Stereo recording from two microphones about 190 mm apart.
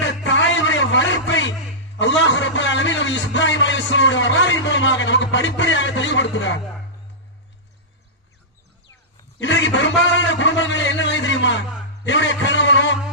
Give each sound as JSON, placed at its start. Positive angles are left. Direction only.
{"t": 0.3, "sound": "a sound", "side_deg": 75}
{"t": 2.0, "sound": "a man's voice", "side_deg": 75}
{"t": 9.4, "sound": "a man's voice", "side_deg": 70}